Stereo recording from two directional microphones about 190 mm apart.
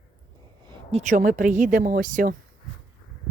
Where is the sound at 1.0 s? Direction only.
40° right (ahead or behind).